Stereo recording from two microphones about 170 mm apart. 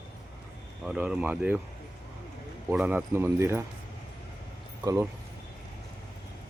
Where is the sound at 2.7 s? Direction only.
5° right (ahead or behind).